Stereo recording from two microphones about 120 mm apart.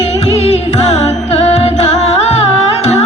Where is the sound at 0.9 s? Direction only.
60° left (ahead or behind).